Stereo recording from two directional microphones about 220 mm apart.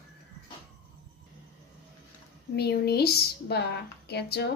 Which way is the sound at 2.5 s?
45° left (ahead or behind).